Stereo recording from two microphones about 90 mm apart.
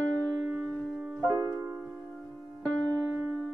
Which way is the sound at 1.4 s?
30° right (ahead or behind).